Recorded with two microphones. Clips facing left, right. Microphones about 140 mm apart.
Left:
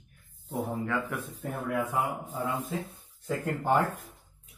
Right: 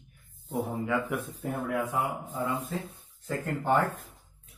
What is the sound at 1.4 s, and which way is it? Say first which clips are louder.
Speech: left 1 dB; centre (ahead or behind).